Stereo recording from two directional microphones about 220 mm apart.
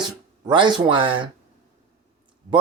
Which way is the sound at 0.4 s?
20° right (ahead or behind).